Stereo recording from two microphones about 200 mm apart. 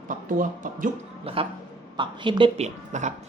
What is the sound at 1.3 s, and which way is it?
A woman's voice, 30° right (ahead or behind).